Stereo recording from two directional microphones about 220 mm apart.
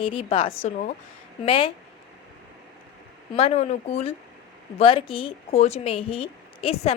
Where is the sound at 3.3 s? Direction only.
30° left (ahead or behind).